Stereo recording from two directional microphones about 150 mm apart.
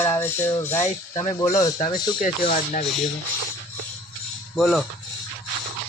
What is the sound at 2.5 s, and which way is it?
Speech, 55° left (ahead or behind).